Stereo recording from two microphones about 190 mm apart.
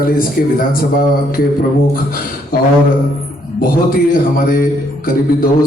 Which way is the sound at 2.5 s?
50° left (ahead or behind).